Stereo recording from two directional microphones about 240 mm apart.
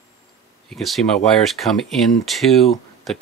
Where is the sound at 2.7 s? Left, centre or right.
Centre.